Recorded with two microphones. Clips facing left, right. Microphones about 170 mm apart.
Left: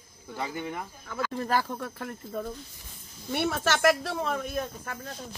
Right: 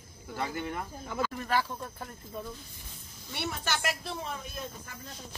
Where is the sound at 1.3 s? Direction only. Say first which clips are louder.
Left 5 dB; 40° left (ahead or behind).